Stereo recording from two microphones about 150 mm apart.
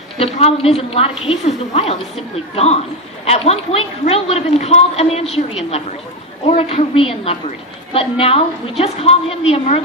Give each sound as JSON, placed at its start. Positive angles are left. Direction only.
{"t": 0.2, "sound": "a woman's voice", "side_deg": 40}